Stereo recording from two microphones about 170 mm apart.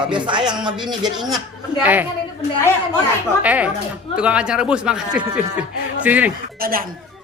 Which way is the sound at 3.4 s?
10° right (ahead or behind).